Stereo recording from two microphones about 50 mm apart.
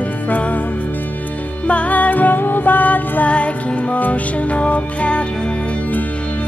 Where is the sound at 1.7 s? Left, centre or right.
Left.